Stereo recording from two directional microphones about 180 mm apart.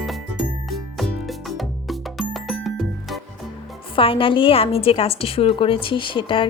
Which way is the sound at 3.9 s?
30° left (ahead or behind).